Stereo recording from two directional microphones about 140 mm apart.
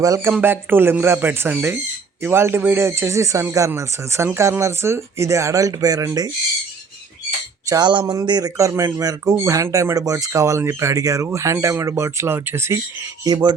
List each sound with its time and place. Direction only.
0.0 s speech: 20° right (ahead or behind)
7.7 s speech: 30° right (ahead or behind)
13.2 s speech: 30° right (ahead or behind)